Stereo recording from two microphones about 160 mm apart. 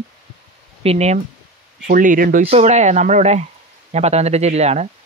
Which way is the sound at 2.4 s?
45° right (ahead or behind).